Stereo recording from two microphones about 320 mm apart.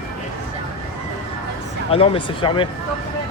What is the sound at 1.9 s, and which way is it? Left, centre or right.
Speech, centre.